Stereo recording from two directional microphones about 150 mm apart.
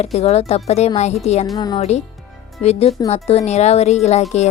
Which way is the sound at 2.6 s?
45° left (ahead or behind).